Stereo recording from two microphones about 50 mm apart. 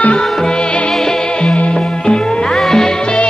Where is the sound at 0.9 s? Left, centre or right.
Centre.